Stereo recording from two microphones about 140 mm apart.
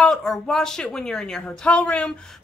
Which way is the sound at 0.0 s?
5° left (ahead or behind).